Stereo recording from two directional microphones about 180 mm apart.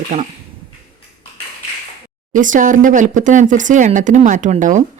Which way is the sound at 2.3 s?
45° right (ahead or behind).